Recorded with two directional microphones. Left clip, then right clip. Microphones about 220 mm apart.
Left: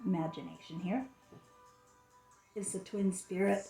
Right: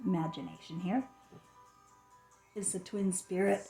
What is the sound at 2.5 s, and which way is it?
Speech, 40° right (ahead or behind).